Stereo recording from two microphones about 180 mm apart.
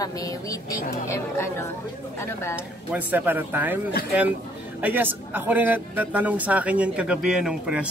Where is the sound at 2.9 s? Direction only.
10° right (ahead or behind).